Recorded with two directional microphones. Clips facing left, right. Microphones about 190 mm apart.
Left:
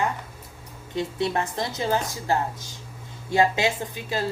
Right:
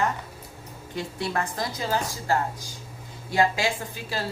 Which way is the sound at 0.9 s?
25° left (ahead or behind).